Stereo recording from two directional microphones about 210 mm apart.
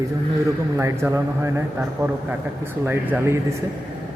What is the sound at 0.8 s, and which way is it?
Speech, 15° right (ahead or behind).